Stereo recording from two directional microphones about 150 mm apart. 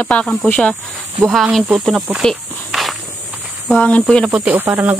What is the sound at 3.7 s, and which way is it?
Speech, 10° left (ahead or behind).